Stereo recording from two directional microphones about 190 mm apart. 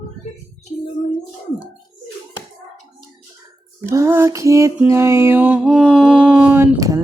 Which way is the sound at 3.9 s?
15° right (ahead or behind).